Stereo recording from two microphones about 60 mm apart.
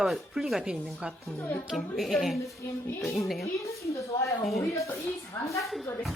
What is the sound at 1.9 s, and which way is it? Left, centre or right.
Speech, centre.